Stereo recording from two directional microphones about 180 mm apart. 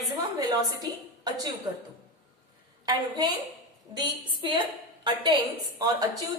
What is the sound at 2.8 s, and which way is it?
A woman's voice, 20° right (ahead or behind).